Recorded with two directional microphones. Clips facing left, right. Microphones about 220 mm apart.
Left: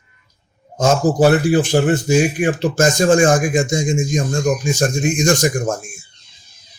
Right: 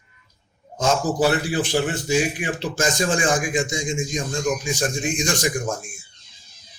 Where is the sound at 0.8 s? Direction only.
45° left (ahead or behind).